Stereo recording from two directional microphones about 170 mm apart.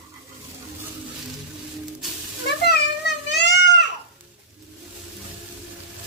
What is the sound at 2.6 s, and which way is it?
Child singing, 80° left.